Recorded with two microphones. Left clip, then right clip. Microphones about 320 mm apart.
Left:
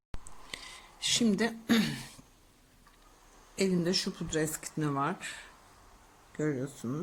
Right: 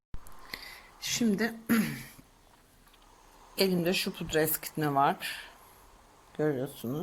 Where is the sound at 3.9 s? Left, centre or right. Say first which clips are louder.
Right 3 dB; centre.